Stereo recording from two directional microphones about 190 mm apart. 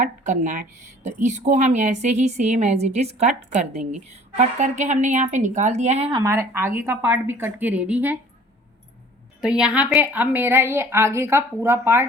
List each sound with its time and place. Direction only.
0.0 s speech: 40° right (ahead or behind)
6.1 s a woman's voice: 20° right (ahead or behind)
9.4 s a woman's voice: 5° right (ahead or behind)